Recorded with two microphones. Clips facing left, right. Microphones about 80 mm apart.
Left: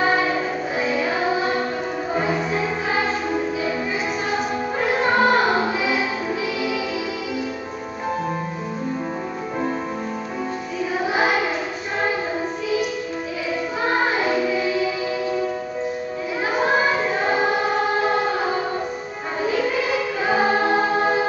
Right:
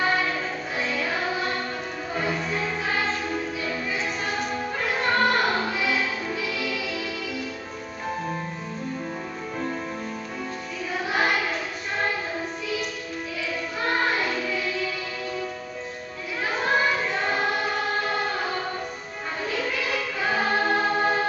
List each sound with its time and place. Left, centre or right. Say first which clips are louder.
0.0 s music: left 5 dB; centre
4.7 s music: left 5 dB; centre
11.1 s child singing: left 3 dB; centre
13.8 s music: left 4 dB; centre
16.5 s choir: left 4 dB; centre